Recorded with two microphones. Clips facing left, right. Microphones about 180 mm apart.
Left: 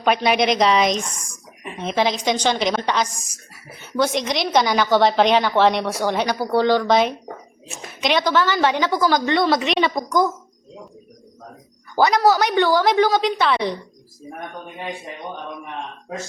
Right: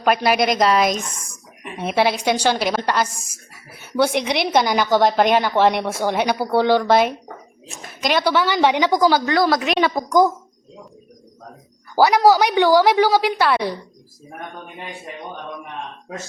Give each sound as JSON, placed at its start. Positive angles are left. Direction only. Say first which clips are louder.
{"t": 0.0, "sound": "a woman's voice", "louder": "right 1 dB", "side_deg": -5}
{"t": 11.9, "sound": "a woman's voice", "louder": "right 2 dB", "side_deg": -10}